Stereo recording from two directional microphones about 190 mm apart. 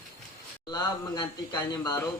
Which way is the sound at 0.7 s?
25° left (ahead or behind).